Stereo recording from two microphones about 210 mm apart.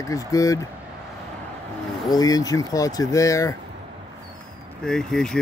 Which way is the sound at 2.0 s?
20° left (ahead or behind).